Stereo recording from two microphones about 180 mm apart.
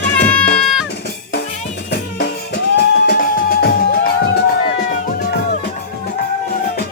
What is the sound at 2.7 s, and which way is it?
Music, 60° left (ahead or behind).